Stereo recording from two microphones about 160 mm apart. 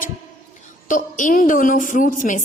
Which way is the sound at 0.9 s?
55° left (ahead or behind).